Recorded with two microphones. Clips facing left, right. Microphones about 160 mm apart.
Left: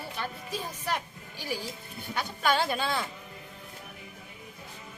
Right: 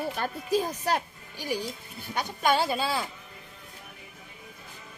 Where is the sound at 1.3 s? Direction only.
15° right (ahead or behind).